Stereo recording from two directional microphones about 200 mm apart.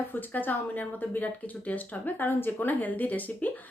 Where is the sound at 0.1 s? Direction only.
10° left (ahead or behind).